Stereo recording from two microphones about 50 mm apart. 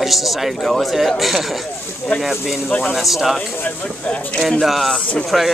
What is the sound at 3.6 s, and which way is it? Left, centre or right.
Speech, left.